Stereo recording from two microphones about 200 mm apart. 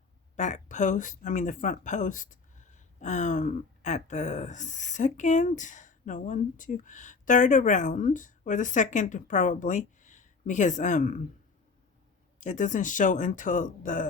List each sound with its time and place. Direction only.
0.3 s speech: 35° left (ahead or behind)
12.4 s speech: 40° left (ahead or behind)